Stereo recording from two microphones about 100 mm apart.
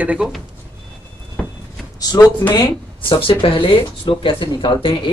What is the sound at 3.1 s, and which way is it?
Speech, 60° left (ahead or behind).